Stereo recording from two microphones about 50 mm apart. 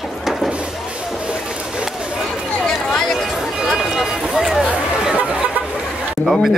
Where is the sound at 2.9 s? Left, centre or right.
Centre.